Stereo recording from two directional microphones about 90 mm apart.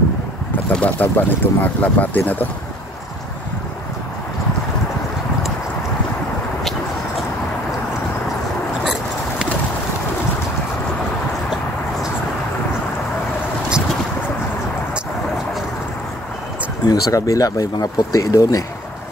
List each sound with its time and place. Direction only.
0.7 s speech: 20° left (ahead or behind)
13.7 s a sound: 10° right (ahead or behind)
16.8 s speech: 45° left (ahead or behind)